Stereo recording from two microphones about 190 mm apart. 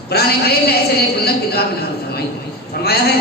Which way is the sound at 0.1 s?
55° left (ahead or behind).